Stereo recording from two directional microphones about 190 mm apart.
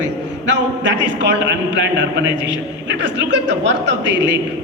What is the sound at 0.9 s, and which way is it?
A man's voice, 70° right (ahead or behind).